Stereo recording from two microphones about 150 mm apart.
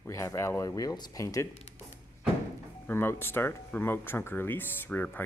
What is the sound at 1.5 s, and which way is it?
Speech, 45° left (ahead or behind).